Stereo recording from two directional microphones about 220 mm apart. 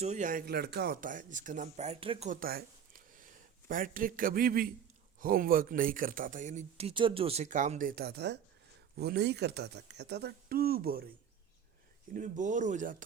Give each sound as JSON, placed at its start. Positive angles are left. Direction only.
{"t": 0.0, "sound": "speech", "side_deg": -35}
{"t": 12.1, "sound": "speech", "side_deg": -35}